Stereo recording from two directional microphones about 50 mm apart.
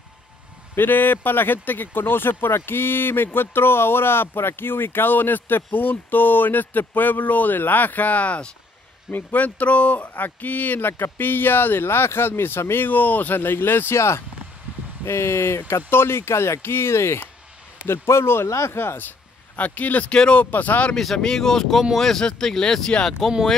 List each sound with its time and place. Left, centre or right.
0.7 s speech: left
12.8 s speech: left
13.9 s speech: left
18.8 s speech: left
20.5 s speech: left
20.9 s speech: centre